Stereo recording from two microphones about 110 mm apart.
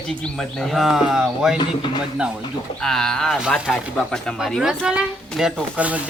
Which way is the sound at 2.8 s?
5° left (ahead or behind).